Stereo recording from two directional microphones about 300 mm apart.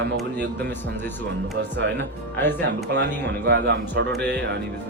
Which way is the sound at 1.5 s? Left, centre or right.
Right.